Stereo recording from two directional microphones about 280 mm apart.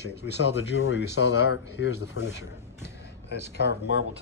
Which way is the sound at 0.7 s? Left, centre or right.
Left.